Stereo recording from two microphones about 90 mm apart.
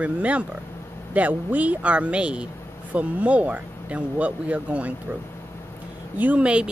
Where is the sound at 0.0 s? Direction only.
15° right (ahead or behind).